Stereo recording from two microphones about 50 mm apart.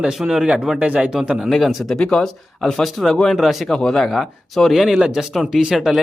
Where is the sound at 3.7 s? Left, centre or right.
Centre.